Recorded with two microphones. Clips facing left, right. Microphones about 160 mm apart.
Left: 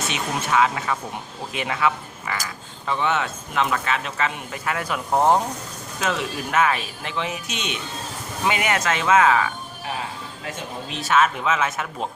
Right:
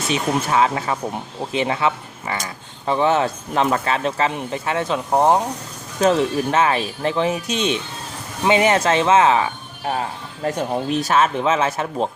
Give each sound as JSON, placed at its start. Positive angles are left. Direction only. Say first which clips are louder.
{"t": 0.1, "sound": "speech", "louder": "right 6 dB", "side_deg": -35}
{"t": 6.0, "sound": "speech", "louder": "right 9 dB", "side_deg": -35}
{"t": 10.4, "sound": "speech", "louder": "right 12 dB", "side_deg": -45}